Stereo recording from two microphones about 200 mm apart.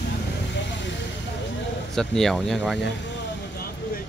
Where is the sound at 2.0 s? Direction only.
Centre (ahead or behind).